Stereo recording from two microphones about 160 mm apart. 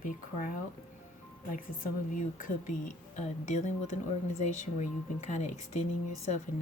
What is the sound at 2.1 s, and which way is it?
Speech, 55° left (ahead or behind).